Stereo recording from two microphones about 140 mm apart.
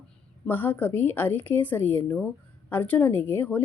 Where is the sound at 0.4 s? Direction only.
15° left (ahead or behind).